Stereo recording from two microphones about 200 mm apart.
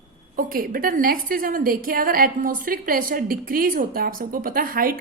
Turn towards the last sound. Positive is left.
turn(degrees=-45)  # may be behind; listen again after turning